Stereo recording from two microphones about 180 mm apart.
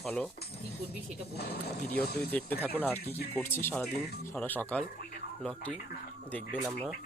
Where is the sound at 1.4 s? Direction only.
60° left (ahead or behind).